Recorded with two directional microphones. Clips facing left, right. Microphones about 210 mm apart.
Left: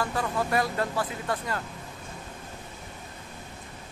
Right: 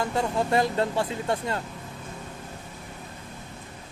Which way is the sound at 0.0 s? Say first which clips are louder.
Right 3 dB; 25° right (ahead or behind).